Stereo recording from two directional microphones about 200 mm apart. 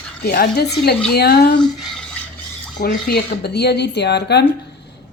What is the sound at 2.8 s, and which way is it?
Speech, 50° left (ahead or behind).